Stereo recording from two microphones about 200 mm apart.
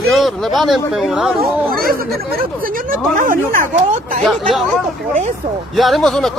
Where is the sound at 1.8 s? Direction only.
45° right (ahead or behind).